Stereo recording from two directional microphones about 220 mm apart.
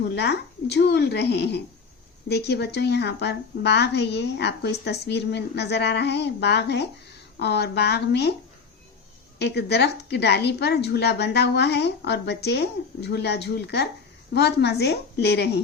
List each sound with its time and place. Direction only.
0.1 s a woman's voice: 50° left (ahead or behind)
9.4 s a woman's voice: 50° left (ahead or behind)